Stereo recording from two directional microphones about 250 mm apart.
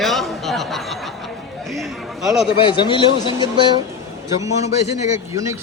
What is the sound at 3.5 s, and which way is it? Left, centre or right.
Speech, centre.